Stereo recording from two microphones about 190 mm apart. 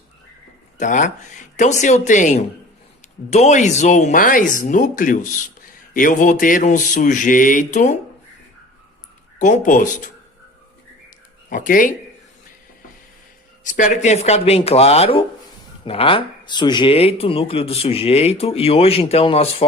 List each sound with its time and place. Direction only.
0.8 s speech: 40° left (ahead or behind)
9.4 s speech: 40° left (ahead or behind)
11.4 s speech: 45° left (ahead or behind)
13.7 s speech: 40° left (ahead or behind)